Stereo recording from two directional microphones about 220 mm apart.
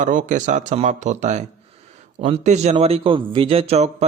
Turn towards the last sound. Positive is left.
turn(degrees=-30)  # may be behind; listen again after turning